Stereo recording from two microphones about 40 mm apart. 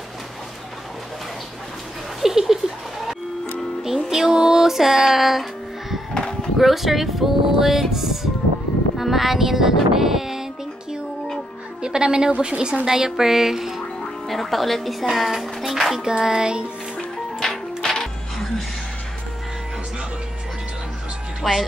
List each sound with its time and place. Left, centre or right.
2.2 s a sound: centre
3.8 s music: centre
6.6 s speech: centre
11.8 s music: right
12.3 s a woman's voice: right
12.8 s speech: centre
14.2 s speech: centre
16.0 s music: centre
17.4 s music: centre
21.4 s speech: centre